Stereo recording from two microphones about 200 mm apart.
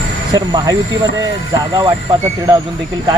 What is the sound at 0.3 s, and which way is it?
Speech, 20° right (ahead or behind).